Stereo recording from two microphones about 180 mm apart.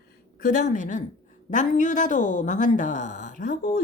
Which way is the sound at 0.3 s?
50° left (ahead or behind).